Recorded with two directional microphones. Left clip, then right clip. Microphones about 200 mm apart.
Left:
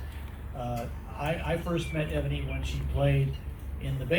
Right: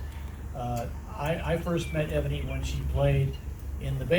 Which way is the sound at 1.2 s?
25° right (ahead or behind).